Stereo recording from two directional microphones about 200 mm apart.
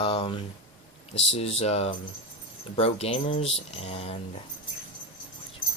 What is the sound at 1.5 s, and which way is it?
Speech, 30° left (ahead or behind).